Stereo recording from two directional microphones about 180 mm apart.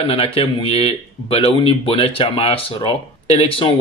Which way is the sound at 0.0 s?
35° left (ahead or behind).